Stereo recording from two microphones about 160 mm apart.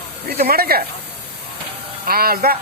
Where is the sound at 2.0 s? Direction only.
70° right (ahead or behind).